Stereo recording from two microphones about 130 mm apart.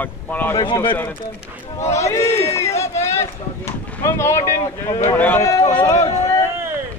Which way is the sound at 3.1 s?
20° left (ahead or behind).